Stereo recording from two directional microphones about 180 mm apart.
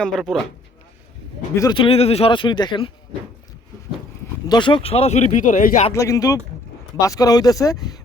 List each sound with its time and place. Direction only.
0.0 s speech: centre (ahead or behind)
1.5 s speech: 25° left (ahead or behind)
4.4 s speech: 25° left (ahead or behind); by 5.9 s 45° left (ahead or behind)
5.9 s speech: 20° left (ahead or behind)